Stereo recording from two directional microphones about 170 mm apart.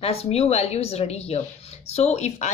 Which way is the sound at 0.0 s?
35° left (ahead or behind).